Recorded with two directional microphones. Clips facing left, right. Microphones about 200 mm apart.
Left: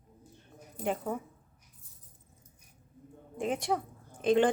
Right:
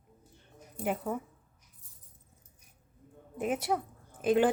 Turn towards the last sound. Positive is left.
turn(degrees=-5)  # may be behind; listen again after turning